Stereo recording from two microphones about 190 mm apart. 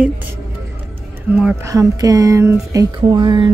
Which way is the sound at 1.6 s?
20° right (ahead or behind).